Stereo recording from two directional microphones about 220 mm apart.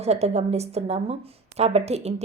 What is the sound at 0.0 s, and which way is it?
A woman's voice, 30° right (ahead or behind).